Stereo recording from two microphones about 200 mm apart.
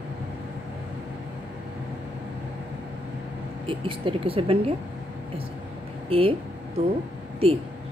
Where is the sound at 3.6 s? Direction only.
25° right (ahead or behind).